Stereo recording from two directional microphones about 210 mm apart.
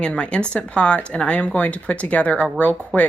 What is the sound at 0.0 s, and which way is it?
Speech, 5° left (ahead or behind).